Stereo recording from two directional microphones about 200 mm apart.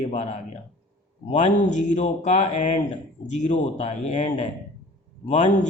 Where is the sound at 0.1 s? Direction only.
30° left (ahead or behind).